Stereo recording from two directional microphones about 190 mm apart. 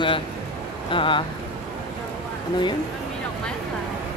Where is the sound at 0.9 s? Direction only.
25° left (ahead or behind).